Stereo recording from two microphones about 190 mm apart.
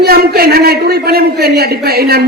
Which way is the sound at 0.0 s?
55° right (ahead or behind).